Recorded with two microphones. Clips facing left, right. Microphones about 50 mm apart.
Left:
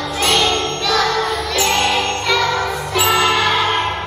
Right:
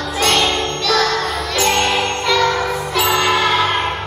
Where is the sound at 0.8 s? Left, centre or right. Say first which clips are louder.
Even; centre.